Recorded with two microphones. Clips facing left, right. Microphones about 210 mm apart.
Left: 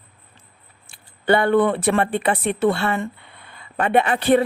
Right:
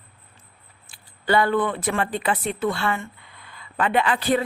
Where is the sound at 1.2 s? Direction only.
25° left (ahead or behind).